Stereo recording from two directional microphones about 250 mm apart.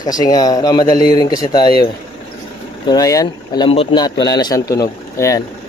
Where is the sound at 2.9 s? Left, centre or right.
Centre.